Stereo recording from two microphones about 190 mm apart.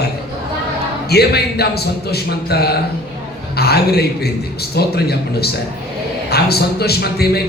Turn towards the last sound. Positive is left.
turn(degrees=55)  # may be behind; listen again after turning